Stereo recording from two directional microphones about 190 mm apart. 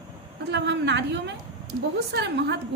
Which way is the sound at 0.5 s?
65° right (ahead or behind).